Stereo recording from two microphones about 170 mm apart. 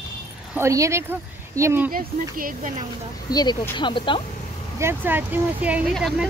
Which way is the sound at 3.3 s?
25° left (ahead or behind).